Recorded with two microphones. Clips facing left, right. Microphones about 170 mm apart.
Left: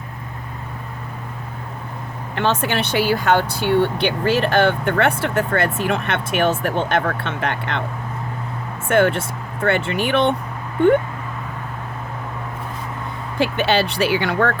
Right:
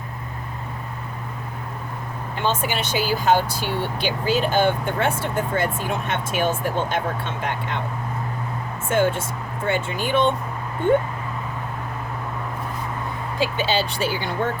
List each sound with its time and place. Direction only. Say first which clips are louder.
2.3 s speech: left 4 dB; 70° left (ahead or behind)
8.9 s speech: left 4 dB; 70° left (ahead or behind)
13.4 s speech: left 4 dB; 65° left (ahead or behind)